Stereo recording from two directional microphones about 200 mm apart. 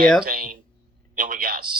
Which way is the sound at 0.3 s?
45° right (ahead or behind).